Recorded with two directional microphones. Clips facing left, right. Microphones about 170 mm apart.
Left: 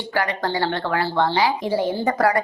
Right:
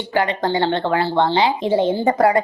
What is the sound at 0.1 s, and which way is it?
A woman's voice, 20° right (ahead or behind).